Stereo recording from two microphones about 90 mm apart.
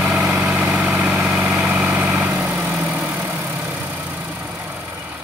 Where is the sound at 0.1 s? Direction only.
15° right (ahead or behind).